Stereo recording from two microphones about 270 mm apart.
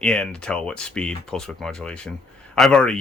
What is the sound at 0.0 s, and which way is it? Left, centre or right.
Speech, centre.